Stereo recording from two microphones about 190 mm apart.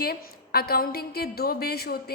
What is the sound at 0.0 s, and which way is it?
A woman's voice, 55° left (ahead or behind).